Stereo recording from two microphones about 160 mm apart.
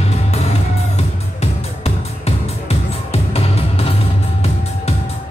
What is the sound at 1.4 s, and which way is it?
Music, 40° left (ahead or behind).